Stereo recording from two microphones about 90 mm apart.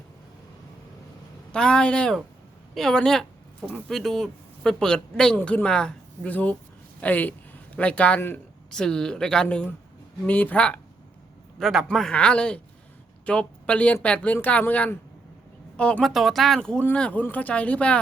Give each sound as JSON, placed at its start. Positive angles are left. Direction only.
{"t": 1.5, "sound": "a man's voice", "side_deg": 10}
{"t": 11.6, "sound": "speech", "side_deg": -5}
{"t": 11.9, "sound": "a man's voice", "side_deg": 5}
{"t": 16.0, "sound": "a man's voice", "side_deg": 0}